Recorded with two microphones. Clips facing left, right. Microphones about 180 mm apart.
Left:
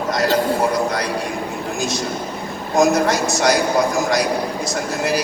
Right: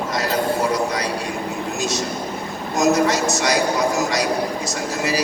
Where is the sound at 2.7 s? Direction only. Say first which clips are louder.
Left 2 dB; 55° left (ahead or behind).